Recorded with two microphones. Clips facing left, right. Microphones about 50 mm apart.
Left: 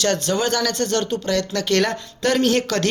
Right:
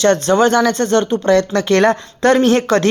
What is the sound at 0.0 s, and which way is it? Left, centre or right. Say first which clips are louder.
Speech: right 8 dB; right.